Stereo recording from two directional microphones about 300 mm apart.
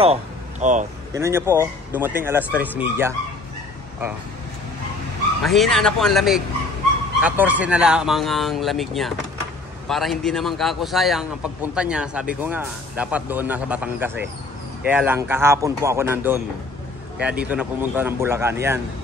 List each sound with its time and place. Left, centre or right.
0.0 s speech: right
1.1 s speech: centre
5.4 s a man's voice: centre